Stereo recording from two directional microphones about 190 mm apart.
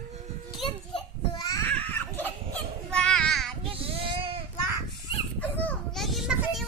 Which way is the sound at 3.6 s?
30° right (ahead or behind).